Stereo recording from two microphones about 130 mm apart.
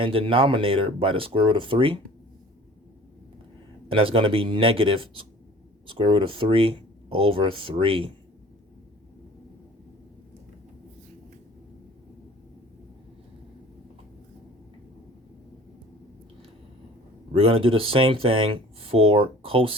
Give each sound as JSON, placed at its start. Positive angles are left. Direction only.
{"t": 0.0, "sound": "speech", "side_deg": -45}
{"t": 3.8, "sound": "speech", "side_deg": -45}
{"t": 17.3, "sound": "speech", "side_deg": -45}